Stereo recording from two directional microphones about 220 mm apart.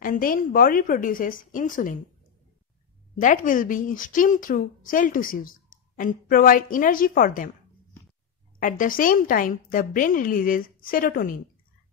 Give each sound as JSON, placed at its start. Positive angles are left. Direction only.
{"t": 0.0, "sound": "a woman's voice", "side_deg": 40}
{"t": 3.2, "sound": "a woman's voice", "side_deg": 35}
{"t": 8.5, "sound": "a woman's voice", "side_deg": 40}